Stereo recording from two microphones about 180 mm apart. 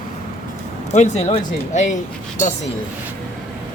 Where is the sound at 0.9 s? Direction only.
40° left (ahead or behind).